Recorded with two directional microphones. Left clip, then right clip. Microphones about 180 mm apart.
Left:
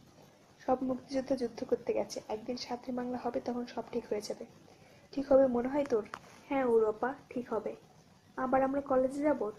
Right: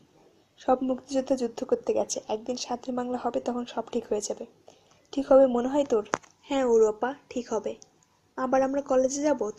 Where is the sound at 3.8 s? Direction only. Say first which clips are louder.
Right 7 dB; 50° right (ahead or behind).